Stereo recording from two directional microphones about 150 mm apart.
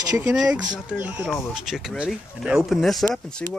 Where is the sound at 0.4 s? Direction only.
5° right (ahead or behind).